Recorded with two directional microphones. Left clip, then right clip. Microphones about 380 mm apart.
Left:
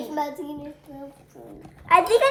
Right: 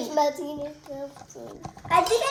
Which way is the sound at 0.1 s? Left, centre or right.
Right.